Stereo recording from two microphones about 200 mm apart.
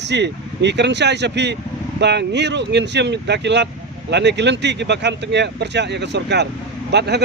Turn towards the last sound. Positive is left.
turn(degrees=-55)  # may be behind; listen again after turning